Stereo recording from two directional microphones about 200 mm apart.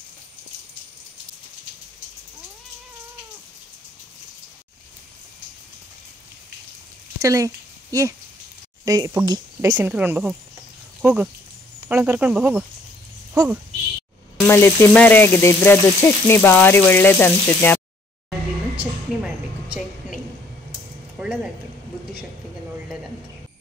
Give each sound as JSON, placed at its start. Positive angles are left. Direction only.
{"t": 7.2, "sound": "speech", "side_deg": -15}
{"t": 14.4, "sound": "speech", "side_deg": 10}
{"t": 21.2, "sound": "speech", "side_deg": -5}